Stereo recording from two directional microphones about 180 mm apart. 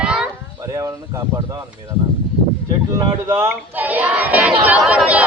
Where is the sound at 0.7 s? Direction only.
20° right (ahead or behind).